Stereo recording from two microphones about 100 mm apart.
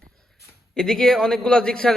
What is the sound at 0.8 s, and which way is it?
A man's voice, 5° left (ahead or behind).